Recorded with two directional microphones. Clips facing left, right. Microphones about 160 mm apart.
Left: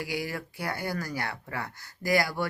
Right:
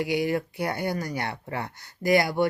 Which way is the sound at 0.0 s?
20° right (ahead or behind).